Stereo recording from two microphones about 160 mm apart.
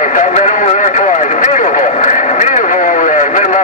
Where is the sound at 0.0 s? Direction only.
50° left (ahead or behind).